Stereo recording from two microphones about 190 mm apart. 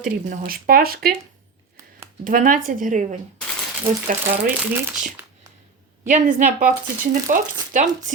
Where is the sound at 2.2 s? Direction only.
45° right (ahead or behind).